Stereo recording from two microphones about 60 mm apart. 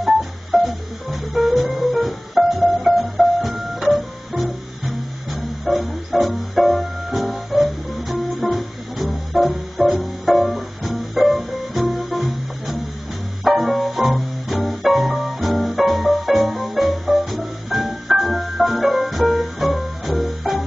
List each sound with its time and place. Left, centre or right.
0.0 s music: centre
3.8 s music: right
5.7 s music: centre
9.8 s music: centre
10.2 s music: centre